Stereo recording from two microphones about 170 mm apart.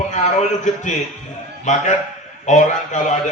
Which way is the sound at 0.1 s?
45° left (ahead or behind).